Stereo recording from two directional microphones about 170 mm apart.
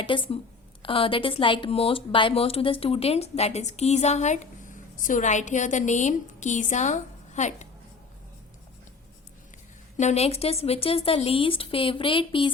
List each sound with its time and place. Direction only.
0.0 s a woman's voice: 30° left (ahead or behind)
10.0 s a woman's voice: 40° left (ahead or behind)